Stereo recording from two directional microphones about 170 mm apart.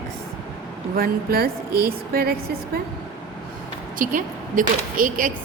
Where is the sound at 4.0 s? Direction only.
50° right (ahead or behind).